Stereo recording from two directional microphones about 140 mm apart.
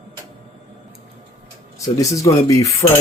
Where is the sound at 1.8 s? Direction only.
25° left (ahead or behind).